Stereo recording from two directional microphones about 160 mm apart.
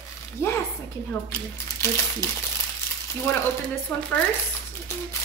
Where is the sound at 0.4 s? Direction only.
15° left (ahead or behind).